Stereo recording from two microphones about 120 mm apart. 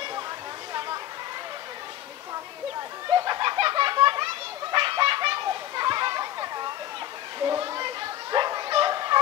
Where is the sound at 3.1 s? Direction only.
40° right (ahead or behind).